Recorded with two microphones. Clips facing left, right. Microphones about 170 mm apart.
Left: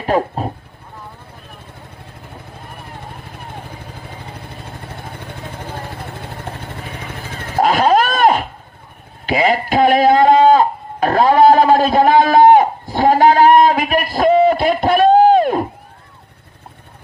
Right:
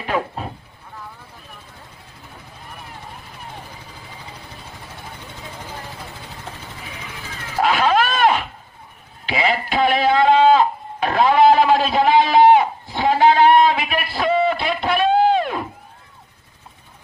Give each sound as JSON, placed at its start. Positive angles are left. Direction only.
{"t": 0.0, "sound": "speech", "side_deg": 40}
{"t": 3.2, "sound": "vehicle", "side_deg": 55}
{"t": 7.7, "sound": "a sound", "side_deg": 40}